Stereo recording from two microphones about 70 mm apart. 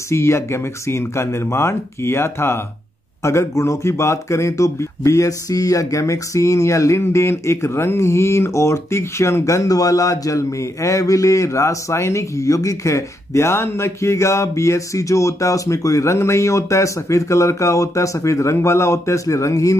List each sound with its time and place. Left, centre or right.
0.1 s speech: left